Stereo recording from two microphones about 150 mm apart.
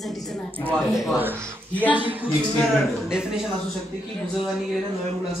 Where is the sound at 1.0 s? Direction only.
10° right (ahead or behind).